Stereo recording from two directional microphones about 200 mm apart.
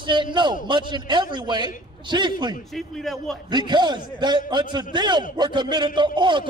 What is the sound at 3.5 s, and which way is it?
A man's voice, 20° right (ahead or behind).